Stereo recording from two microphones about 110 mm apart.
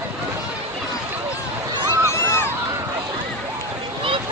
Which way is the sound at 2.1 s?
25° left (ahead or behind).